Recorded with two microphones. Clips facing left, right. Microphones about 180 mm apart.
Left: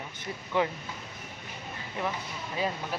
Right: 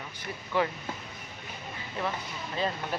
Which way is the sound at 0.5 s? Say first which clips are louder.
Even; 20° left (ahead or behind).